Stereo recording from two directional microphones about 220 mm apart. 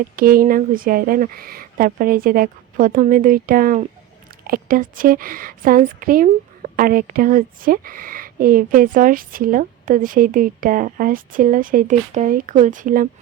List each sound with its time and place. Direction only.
0.2 s a woman's voice: 40° right (ahead or behind)